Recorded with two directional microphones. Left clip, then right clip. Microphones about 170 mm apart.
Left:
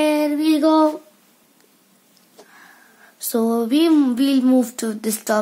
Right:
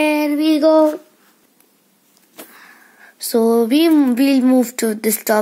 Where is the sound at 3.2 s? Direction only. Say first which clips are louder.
Right 6 dB; 20° right (ahead or behind).